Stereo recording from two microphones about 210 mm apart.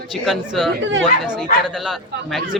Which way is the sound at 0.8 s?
65° right (ahead or behind).